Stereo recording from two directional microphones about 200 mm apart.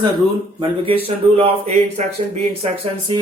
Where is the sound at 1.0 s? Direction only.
30° right (ahead or behind).